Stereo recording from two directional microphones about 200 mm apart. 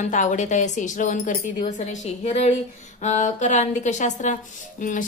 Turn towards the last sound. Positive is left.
turn(degrees=40)  # may be behind; listen again after turning